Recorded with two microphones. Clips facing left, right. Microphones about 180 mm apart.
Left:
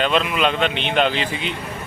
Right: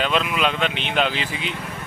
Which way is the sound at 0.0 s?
Centre (ahead or behind).